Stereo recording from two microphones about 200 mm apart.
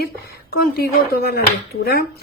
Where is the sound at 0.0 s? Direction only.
50° left (ahead or behind).